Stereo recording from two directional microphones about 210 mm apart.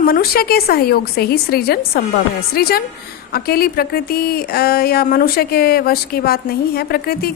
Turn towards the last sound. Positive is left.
turn(degrees=45)  # may be behind; listen again after turning